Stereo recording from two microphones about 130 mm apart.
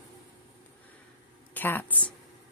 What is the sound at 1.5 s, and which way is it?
Speech, 15° left (ahead or behind).